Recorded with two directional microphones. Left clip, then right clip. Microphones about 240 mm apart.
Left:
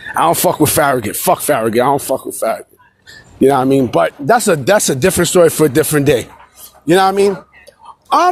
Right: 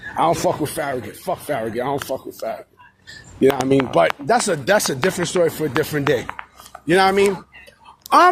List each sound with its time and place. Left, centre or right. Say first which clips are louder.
0.2 s speech: left 6 dB; left